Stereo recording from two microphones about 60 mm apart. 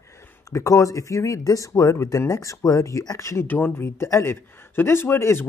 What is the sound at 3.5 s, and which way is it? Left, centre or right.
A man's voice, left.